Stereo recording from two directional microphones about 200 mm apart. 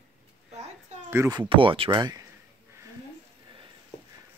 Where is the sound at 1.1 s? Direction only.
15° right (ahead or behind).